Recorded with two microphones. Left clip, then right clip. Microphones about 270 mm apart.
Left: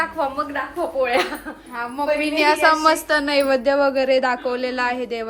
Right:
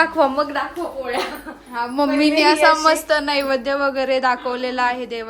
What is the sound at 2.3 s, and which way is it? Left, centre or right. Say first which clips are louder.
A woman's voice: right 1 dB; centre.